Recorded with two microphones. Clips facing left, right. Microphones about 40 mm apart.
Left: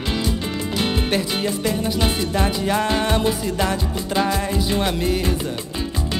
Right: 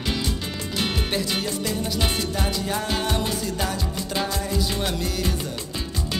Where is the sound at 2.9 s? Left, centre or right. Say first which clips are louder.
Left 5 dB; left.